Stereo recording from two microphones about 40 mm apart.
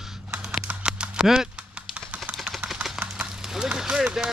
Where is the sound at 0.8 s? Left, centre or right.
Right.